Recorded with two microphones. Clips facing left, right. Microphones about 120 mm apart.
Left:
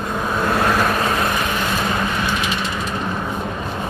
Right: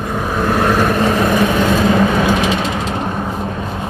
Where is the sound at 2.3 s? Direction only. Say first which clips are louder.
Right 6 dB; 90° right.